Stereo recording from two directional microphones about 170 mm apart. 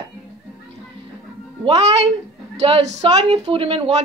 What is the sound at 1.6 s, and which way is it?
Speech, 40° right (ahead or behind).